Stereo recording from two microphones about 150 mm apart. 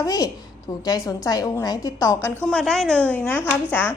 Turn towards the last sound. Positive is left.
turn(degrees=10)  # may be behind; listen again after turning